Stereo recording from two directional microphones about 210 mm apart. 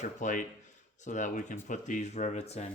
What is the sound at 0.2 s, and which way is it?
Speech, 35° left (ahead or behind).